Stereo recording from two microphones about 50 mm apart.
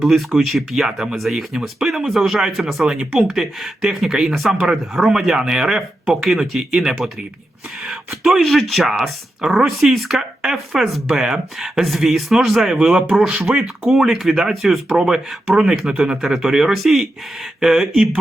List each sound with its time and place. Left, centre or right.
0.0 s speech: centre
14.9 s speech: centre
16.2 s speech: centre